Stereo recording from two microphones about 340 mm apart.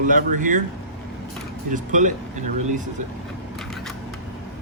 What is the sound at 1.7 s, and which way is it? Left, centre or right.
Speech, right.